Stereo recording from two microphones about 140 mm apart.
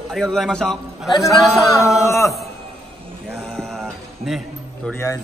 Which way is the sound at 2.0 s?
20° left (ahead or behind).